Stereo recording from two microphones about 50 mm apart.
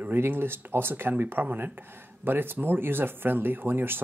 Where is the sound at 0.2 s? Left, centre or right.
Right.